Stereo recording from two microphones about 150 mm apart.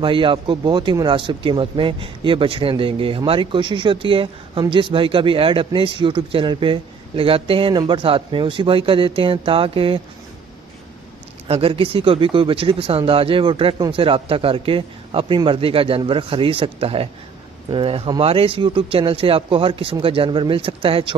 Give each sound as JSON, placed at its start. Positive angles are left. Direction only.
{"t": 0.0, "sound": "speech", "side_deg": -35}
{"t": 11.4, "sound": "speech", "side_deg": -40}